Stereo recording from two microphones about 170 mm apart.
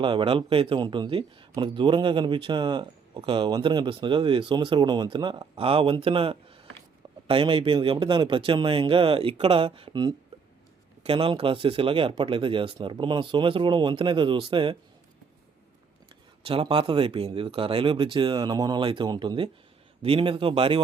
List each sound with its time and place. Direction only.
0.0 s speech: 30° right (ahead or behind)
16.4 s speech: 35° right (ahead or behind)